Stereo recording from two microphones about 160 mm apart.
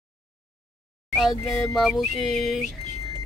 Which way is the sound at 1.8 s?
Centre (ahead or behind).